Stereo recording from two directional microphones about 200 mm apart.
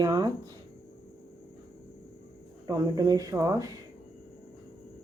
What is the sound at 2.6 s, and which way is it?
Speech, 15° right (ahead or behind).